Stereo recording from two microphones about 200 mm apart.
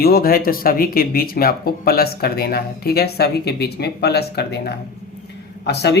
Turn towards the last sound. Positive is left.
turn(degrees=55)  # may be behind; listen again after turning